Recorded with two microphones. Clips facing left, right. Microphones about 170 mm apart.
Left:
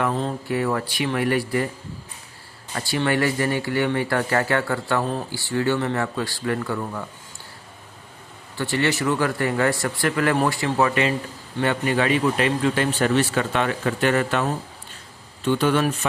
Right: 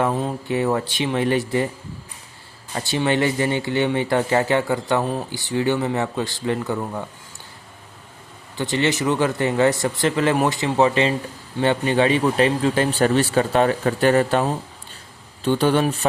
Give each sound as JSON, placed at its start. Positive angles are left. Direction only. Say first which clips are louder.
{"t": 0.1, "sound": "speech", "louder": "right 1 dB", "side_deg": -10}
{"t": 0.4, "sound": "speech", "louder": "right 4 dB", "side_deg": -20}
{"t": 2.7, "sound": "speech", "louder": "right 2 dB", "side_deg": -20}
{"t": 8.5, "sound": "speech", "louder": "right 2 dB", "side_deg": -20}
{"t": 15.4, "sound": "speech", "louder": "right 2 dB", "side_deg": -35}